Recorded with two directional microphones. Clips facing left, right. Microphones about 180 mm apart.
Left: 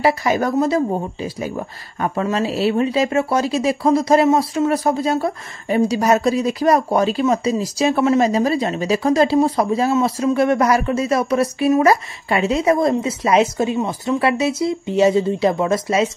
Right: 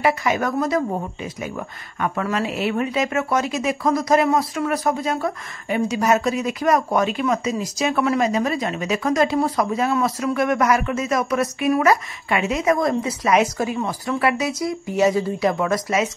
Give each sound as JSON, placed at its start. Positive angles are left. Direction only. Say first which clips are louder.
{"t": 0.0, "sound": "speech", "louder": "left 3 dB", "side_deg": 35}